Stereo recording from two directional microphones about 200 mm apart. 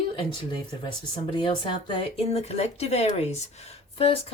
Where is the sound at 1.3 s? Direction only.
25° left (ahead or behind).